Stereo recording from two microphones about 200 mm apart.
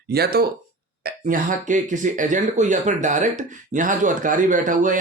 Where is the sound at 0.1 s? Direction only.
50° right (ahead or behind).